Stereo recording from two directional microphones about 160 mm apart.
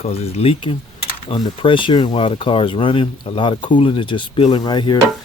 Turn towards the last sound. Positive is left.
turn(degrees=30)  # may be behind; listen again after turning